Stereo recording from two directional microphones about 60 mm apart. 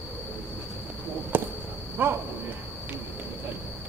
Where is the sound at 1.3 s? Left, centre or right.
Right.